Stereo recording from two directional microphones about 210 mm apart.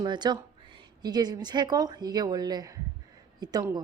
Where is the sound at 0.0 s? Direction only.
20° right (ahead or behind).